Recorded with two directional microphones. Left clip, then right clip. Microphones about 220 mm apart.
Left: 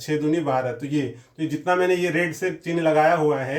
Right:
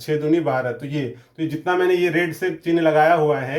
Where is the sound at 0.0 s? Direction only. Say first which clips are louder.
Right 3 dB; 35° right (ahead or behind).